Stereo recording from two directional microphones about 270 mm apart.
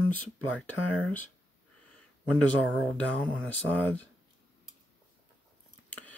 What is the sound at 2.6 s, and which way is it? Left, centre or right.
Speech, centre.